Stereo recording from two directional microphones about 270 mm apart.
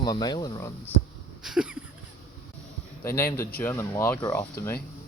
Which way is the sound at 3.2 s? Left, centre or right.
Centre.